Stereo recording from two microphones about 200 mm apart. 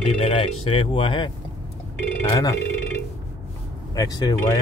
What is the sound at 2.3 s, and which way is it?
Speech, 20° left (ahead or behind).